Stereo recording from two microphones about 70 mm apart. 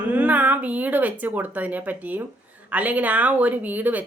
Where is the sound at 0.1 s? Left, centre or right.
Right.